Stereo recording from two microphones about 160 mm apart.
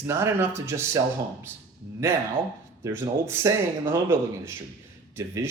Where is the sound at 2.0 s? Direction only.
15° right (ahead or behind).